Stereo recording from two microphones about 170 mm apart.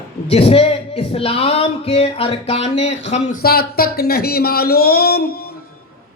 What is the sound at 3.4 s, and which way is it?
Speech, 65° left (ahead or behind).